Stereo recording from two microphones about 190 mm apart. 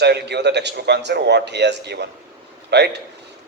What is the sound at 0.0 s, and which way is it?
A man's voice, 60° right (ahead or behind).